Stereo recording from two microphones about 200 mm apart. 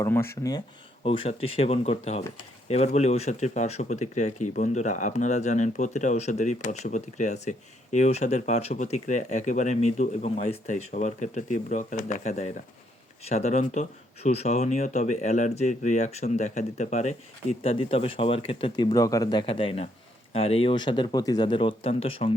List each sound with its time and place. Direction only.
0.0 s speech: 10° left (ahead or behind)
1.0 s speech: 30° left (ahead or behind)